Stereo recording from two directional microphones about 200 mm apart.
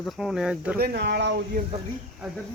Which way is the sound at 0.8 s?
55° right (ahead or behind).